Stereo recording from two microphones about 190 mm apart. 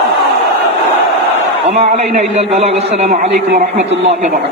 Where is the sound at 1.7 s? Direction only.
35° right (ahead or behind).